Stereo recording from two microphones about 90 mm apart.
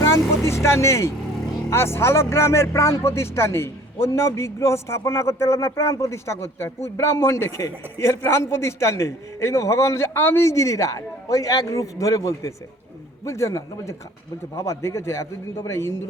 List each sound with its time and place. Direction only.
0.0 s vehicle: 30° left (ahead or behind)
1.7 s speech: 30° left (ahead or behind)